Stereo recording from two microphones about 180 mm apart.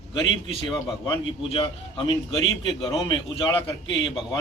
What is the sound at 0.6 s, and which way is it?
A man's voice, 30° left (ahead or behind).